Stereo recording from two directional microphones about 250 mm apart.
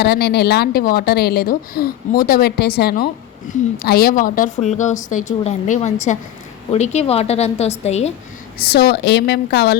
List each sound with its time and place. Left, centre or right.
0.0 s a woman's voice: left
8.5 s a woman's voice: left